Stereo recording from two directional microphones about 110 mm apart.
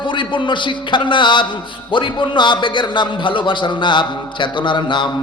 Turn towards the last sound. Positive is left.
turn(degrees=45)  # may be behind; listen again after turning